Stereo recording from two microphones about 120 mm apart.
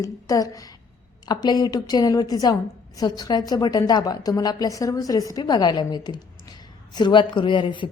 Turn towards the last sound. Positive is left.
turn(degrees=45)  # may be behind; listen again after turning